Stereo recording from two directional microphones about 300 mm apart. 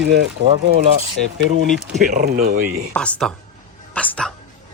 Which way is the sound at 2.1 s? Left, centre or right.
Right.